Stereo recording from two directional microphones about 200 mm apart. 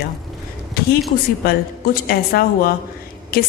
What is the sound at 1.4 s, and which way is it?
A woman's voice, 50° left (ahead or behind).